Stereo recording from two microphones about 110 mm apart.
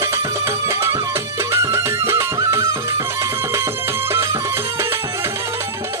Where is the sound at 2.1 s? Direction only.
25° right (ahead or behind).